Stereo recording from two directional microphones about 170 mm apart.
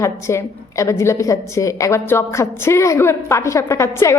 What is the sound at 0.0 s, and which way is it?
A woman's voice, 15° left (ahead or behind).